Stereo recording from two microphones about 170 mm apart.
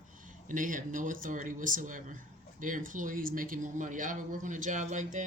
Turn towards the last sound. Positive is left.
turn(degrees=-45)  # may be behind; listen again after turning